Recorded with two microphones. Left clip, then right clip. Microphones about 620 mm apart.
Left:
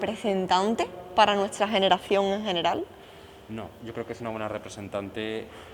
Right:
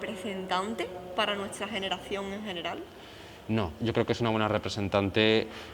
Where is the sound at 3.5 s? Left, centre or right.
Right.